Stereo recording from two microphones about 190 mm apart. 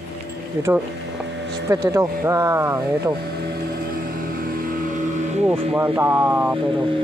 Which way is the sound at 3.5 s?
50° right (ahead or behind).